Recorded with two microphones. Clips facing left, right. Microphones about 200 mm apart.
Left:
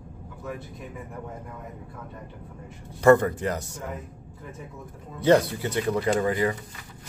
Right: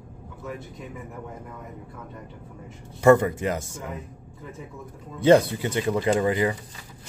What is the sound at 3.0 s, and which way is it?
Speech, 15° right (ahead or behind).